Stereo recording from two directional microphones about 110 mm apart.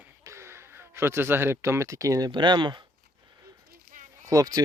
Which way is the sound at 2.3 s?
45° right (ahead or behind).